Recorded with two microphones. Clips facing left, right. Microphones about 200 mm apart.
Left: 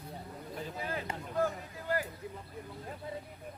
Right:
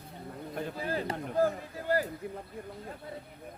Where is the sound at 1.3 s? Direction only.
35° right (ahead or behind).